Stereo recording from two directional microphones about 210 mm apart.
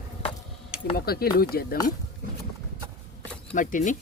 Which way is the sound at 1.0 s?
45° left (ahead or behind).